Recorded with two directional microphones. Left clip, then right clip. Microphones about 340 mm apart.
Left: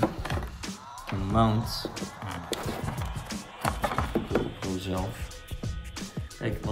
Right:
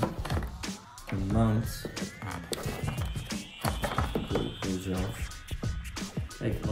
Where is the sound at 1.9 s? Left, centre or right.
Centre.